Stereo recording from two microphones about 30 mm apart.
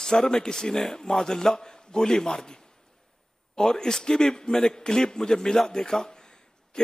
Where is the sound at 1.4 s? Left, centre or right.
Left.